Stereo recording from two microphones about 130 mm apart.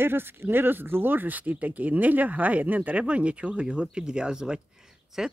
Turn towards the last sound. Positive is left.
turn(degrees=-5)  # may be behind; listen again after turning